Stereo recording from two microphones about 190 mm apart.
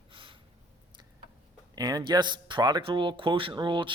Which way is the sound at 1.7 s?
20° right (ahead or behind).